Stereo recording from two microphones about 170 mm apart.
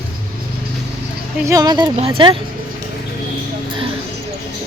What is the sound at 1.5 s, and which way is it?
Speech, 20° right (ahead or behind).